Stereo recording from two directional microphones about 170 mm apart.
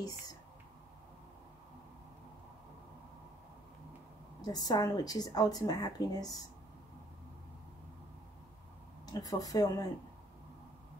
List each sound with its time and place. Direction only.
4.4 s speech: 25° left (ahead or behind)
9.0 s speech: 20° left (ahead or behind)